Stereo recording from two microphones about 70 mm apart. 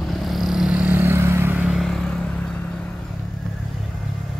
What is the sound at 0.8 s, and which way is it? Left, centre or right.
Vehicle, right.